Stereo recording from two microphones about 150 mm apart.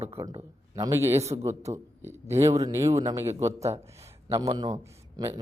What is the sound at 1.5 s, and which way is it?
Speech, 50° right (ahead or behind).